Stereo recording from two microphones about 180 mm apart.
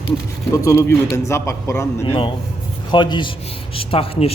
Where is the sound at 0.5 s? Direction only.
15° left (ahead or behind).